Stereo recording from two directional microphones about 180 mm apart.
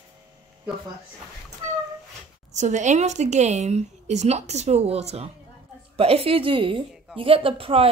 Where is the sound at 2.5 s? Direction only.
40° right (ahead or behind).